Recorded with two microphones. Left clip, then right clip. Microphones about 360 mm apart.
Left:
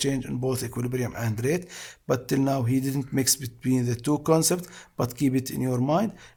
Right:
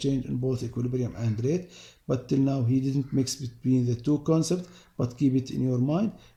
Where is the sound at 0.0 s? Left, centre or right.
Left.